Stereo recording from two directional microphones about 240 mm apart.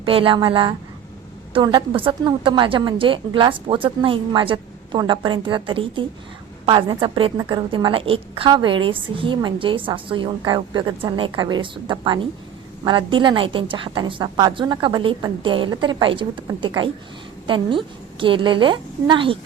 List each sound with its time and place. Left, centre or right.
0.0 s a woman's voice: right